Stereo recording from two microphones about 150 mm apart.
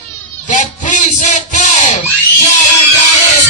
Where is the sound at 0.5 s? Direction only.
60° left (ahead or behind).